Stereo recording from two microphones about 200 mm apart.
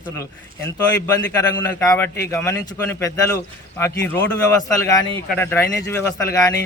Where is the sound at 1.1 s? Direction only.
20° left (ahead or behind).